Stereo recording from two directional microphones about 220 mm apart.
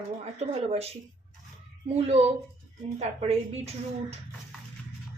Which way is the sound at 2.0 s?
30° right (ahead or behind).